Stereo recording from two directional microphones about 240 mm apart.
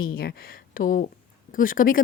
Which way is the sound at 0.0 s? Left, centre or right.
Left.